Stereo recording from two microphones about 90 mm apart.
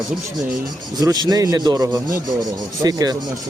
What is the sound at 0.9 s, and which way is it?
Speech, 45° right (ahead or behind).